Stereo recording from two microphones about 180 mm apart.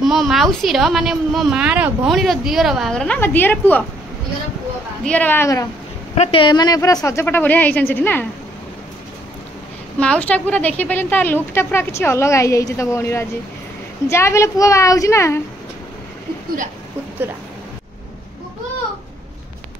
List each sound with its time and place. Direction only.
0.0 s a woman's voice: centre (ahead or behind)
5.0 s a woman's voice: 10° left (ahead or behind)
6.1 s a woman's voice: 35° left (ahead or behind); by 8.3 s 10° left (ahead or behind)
9.9 s a woman's voice: 5° left (ahead or behind)